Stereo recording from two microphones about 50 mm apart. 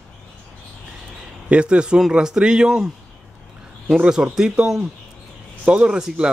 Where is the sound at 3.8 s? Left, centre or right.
Centre.